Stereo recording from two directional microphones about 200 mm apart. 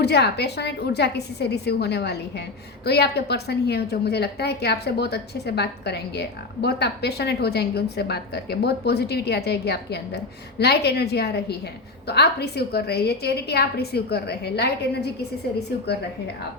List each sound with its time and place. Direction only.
0.0 s a woman's voice: 55° left (ahead or behind)